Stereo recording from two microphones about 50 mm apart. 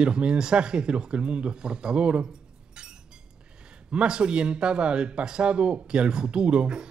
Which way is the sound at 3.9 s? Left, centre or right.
Centre.